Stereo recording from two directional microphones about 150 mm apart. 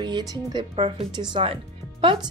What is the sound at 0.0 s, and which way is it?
Speech, 30° right (ahead or behind).